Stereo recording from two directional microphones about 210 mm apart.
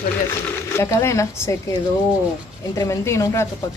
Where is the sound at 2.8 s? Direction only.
15° left (ahead or behind).